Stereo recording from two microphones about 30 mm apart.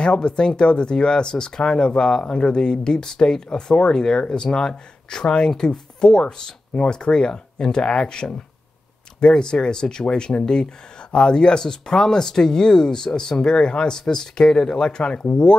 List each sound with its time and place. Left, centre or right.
0.0 s speech: left